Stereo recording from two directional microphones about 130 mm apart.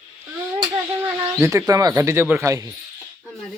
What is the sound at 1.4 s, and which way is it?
Speech, 20° right (ahead or behind).